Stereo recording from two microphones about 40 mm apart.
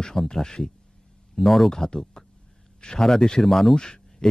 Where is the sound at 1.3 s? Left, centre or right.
Centre.